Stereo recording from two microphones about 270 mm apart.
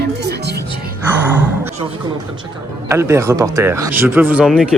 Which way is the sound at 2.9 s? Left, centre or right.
Centre.